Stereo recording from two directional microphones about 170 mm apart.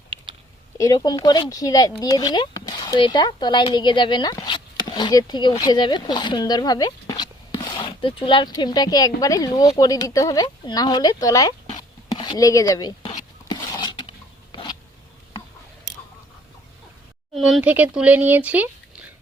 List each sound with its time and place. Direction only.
0.8 s speech: 25° left (ahead or behind)
13.5 s a sound: 25° left (ahead or behind)
17.5 s speech: 10° right (ahead or behind)